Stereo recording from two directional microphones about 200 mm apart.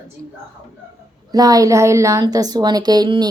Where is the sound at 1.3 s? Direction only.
20° right (ahead or behind).